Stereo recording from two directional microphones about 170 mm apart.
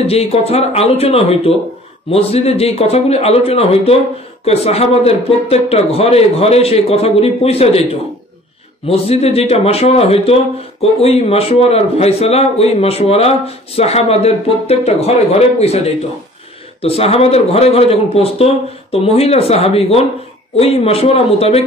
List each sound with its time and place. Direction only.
0.0 s a man's voice: 35° left (ahead or behind)